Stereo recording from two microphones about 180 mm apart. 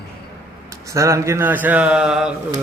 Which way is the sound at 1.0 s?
15° right (ahead or behind).